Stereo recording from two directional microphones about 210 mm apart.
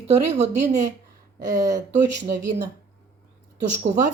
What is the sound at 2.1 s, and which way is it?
Speech, 40° right (ahead or behind).